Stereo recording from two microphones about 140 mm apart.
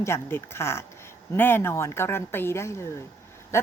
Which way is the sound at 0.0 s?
15° left (ahead or behind).